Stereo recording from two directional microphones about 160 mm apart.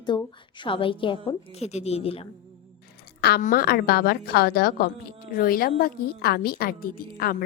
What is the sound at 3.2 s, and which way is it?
Speech, 85° left.